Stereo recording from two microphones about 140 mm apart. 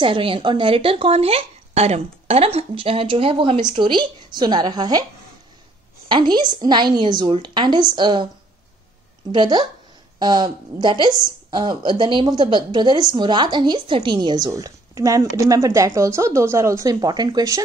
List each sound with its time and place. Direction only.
0.0 s a woman's voice: 40° right (ahead or behind)
6.0 s a woman's voice: 30° right (ahead or behind)
9.3 s a woman's voice: 30° right (ahead or behind)